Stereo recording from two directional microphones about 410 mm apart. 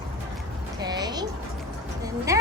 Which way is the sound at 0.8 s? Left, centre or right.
Centre.